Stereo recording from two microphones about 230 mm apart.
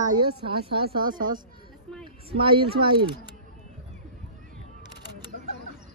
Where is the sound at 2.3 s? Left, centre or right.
Right.